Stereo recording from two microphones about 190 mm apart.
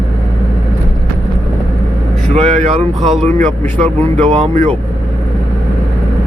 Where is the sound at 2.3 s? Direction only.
35° right (ahead or behind).